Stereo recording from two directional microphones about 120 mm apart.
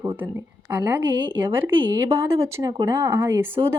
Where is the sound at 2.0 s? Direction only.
20° right (ahead or behind).